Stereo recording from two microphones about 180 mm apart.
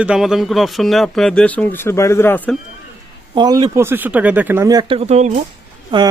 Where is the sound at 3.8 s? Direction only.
10° right (ahead or behind); by 6.1 s 30° right (ahead or behind).